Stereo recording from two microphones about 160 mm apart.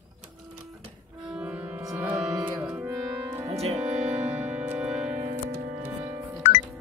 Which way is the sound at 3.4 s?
40° right (ahead or behind).